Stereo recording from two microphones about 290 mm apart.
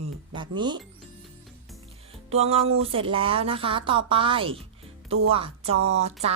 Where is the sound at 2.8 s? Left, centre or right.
Centre.